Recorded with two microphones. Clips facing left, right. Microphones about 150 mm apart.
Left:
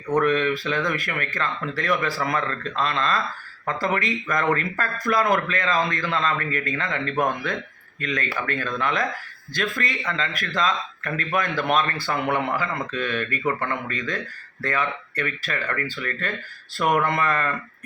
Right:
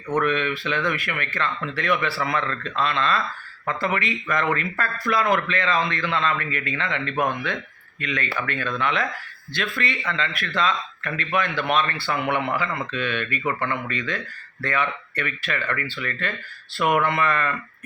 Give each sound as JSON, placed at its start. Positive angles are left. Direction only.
{"t": 0.2, "sound": "speech", "side_deg": 35}